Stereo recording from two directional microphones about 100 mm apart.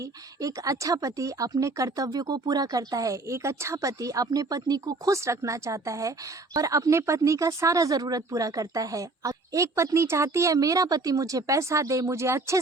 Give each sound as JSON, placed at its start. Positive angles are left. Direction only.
{"t": 0.0, "sound": "a woman's voice", "side_deg": -35}